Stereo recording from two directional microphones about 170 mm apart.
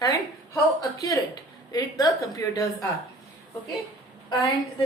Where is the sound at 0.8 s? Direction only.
20° left (ahead or behind).